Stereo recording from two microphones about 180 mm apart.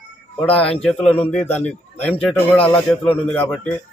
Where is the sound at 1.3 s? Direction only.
10° left (ahead or behind).